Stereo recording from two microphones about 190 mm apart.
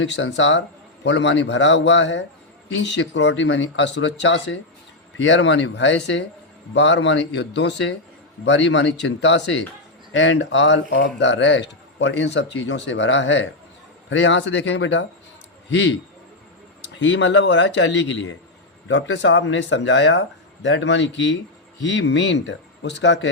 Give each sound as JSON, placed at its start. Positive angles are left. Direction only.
{"t": 0.0, "sound": "speech", "side_deg": 80}
{"t": 16.8, "sound": "speech", "side_deg": 70}